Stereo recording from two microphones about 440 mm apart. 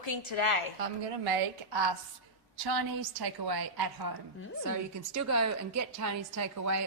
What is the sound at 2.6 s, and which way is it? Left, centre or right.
A woman's voice, right.